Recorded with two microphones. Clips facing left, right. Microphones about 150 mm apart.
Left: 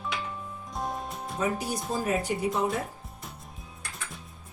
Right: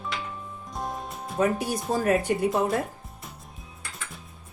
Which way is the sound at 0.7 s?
Centre (ahead or behind).